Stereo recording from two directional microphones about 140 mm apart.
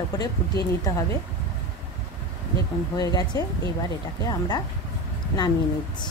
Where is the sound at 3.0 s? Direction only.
30° left (ahead or behind).